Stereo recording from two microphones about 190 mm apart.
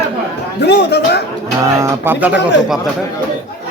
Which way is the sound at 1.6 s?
15° right (ahead or behind).